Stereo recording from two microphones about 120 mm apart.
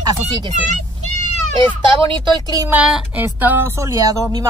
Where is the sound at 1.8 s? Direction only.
45° right (ahead or behind).